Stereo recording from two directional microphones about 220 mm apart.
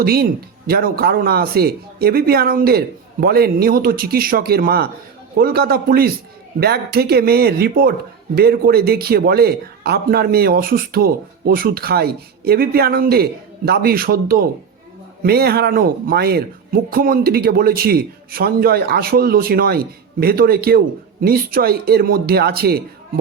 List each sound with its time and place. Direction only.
0.0 s speech: 45° right (ahead or behind)